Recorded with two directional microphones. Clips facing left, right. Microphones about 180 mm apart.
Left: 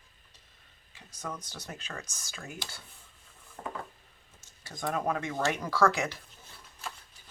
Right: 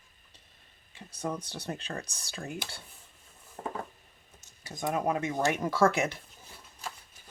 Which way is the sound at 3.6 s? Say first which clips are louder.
Right 2 dB; 25° right (ahead or behind).